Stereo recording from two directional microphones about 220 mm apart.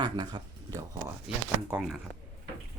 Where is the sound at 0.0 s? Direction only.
20° right (ahead or behind).